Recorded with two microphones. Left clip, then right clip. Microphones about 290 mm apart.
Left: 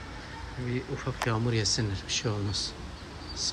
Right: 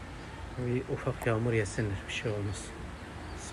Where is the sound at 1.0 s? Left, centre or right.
Centre.